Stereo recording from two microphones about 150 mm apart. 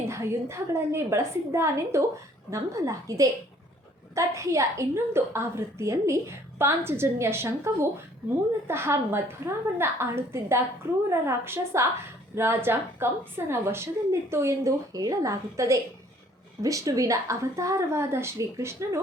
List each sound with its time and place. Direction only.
0.1 s a woman's voice: 20° right (ahead or behind)